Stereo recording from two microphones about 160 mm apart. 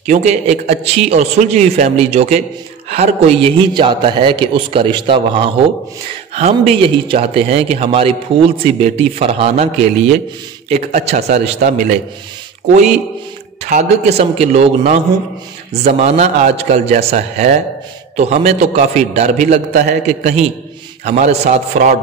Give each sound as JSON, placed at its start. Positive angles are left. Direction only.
{"t": 0.0, "sound": "a man's voice", "side_deg": -45}
{"t": 10.7, "sound": "a man's voice", "side_deg": -40}
{"t": 13.7, "sound": "a man's voice", "side_deg": -45}